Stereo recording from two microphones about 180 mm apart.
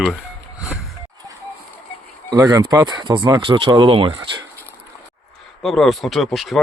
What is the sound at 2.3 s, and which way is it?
Speech, 20° right (ahead or behind).